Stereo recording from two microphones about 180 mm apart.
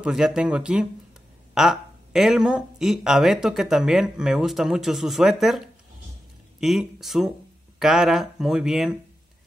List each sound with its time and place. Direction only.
0.0 s speech: 5° right (ahead or behind)